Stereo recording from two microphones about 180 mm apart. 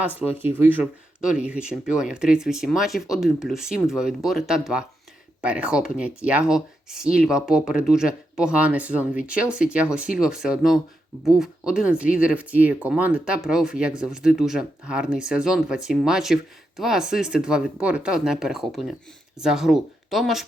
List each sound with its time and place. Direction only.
0.0 s speech: 10° right (ahead or behind)